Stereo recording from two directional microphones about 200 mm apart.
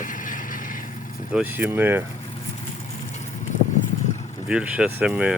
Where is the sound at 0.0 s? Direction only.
40° left (ahead or behind).